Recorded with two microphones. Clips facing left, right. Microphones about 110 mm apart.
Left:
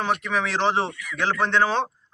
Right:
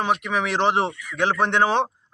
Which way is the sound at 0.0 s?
10° right (ahead or behind).